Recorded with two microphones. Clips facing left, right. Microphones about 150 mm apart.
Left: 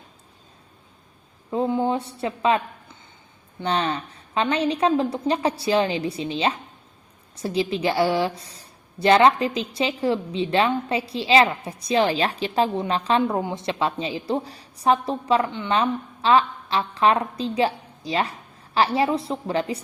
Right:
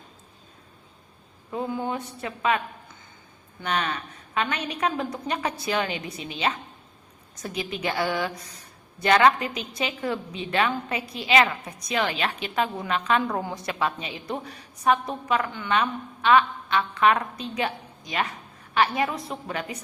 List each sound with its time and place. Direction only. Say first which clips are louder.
1.5 s a woman's voice: left 6 dB; 25° left (ahead or behind)
3.6 s a woman's voice: left 4 dB; 30° left (ahead or behind)